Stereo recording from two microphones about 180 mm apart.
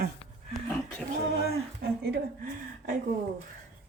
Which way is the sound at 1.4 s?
60° right (ahead or behind).